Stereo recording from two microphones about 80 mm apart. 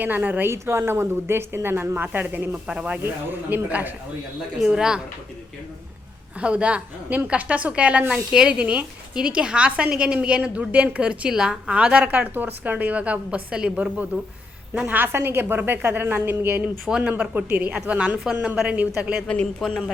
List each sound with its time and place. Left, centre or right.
0.0 s a woman's voice: right
0.5 s a woman's voice: right
2.6 s a woman's voice: centre
4.5 s a woman's voice: centre
6.4 s a woman's voice: centre
19.3 s speech: centre